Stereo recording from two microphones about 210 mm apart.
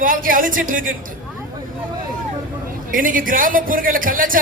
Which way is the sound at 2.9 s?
40° right (ahead or behind).